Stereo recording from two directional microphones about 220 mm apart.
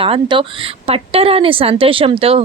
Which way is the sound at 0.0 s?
25° right (ahead or behind).